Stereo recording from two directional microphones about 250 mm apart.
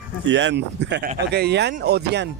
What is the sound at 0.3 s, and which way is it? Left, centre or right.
Speech, right.